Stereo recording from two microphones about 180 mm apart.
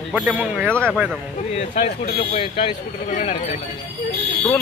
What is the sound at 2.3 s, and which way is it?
Speech, 30° left (ahead or behind).